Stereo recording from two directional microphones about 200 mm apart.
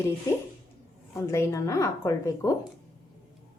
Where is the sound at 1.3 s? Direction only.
15° left (ahead or behind).